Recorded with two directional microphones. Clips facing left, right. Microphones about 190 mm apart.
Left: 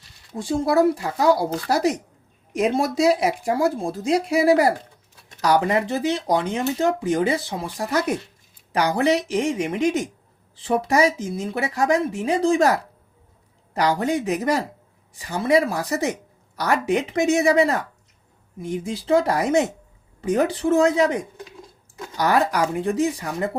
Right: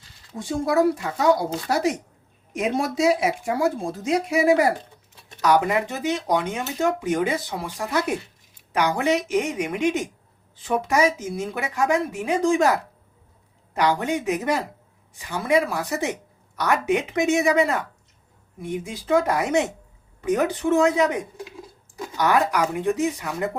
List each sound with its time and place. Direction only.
0.3 s speech: 35° left (ahead or behind)
8.7 s speech: 35° left (ahead or behind)
13.7 s speech: 35° left (ahead or behind)
18.9 s speech: 30° left (ahead or behind)
22.2 s speech: 35° left (ahead or behind)